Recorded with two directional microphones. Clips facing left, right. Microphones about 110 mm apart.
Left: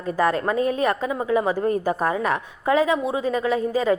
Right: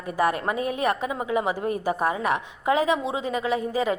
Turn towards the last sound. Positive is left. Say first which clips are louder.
# left 4 dB
turn(degrees=-20)  # may be behind; listen again after turning